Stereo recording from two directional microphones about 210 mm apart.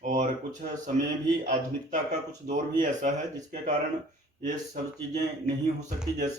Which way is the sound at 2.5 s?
35° right (ahead or behind).